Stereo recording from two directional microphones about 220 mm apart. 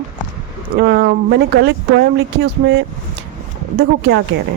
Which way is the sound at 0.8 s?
45° right (ahead or behind).